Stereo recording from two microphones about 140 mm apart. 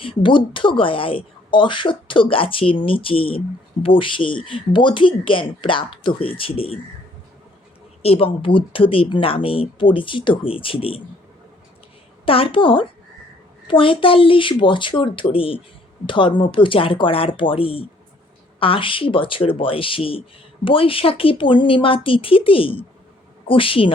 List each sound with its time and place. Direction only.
0.0 s speech: 35° left (ahead or behind)
8.0 s speech: 45° left (ahead or behind)
12.2 s speech: 40° left (ahead or behind)